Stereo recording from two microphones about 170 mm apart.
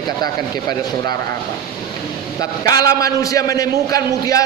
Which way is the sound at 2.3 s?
20° left (ahead or behind).